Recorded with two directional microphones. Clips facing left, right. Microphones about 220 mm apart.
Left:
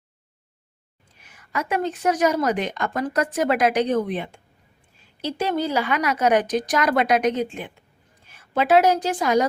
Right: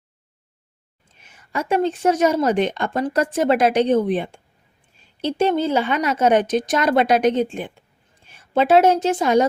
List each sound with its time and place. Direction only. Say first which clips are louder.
1.2 s a woman's voice: right 2 dB; 25° right (ahead or behind)